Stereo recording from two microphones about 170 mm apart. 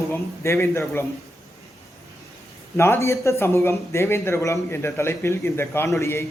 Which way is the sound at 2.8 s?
15° left (ahead or behind).